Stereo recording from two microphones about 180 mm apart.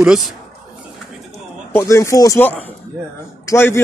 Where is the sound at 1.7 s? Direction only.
15° left (ahead or behind).